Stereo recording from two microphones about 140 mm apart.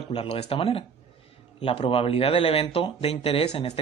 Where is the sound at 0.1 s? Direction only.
45° left (ahead or behind).